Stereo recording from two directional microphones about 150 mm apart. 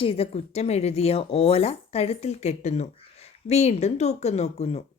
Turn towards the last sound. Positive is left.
turn(degrees=45)  # may be behind; listen again after turning